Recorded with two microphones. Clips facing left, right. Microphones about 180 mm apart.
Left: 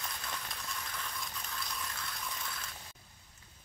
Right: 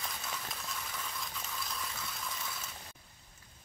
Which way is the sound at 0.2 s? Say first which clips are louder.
Right 1 dB; 5° right (ahead or behind).